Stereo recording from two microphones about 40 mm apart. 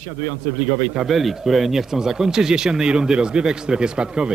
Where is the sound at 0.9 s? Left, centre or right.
Centre.